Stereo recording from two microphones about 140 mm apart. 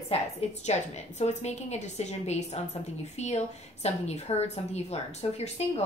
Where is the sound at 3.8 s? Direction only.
50° left (ahead or behind).